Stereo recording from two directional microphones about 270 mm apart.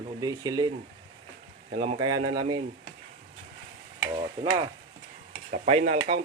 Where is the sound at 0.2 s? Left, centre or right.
Centre.